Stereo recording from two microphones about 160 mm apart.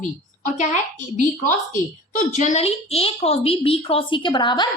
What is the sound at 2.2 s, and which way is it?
A woman's voice, 50° left (ahead or behind).